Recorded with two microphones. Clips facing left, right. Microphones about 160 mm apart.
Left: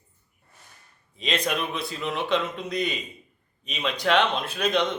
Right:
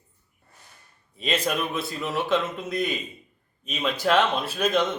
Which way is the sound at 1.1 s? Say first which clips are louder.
Right 1 dB; 5° right (ahead or behind).